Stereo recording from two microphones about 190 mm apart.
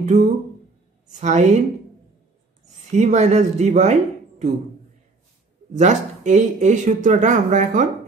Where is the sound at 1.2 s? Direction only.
40° right (ahead or behind).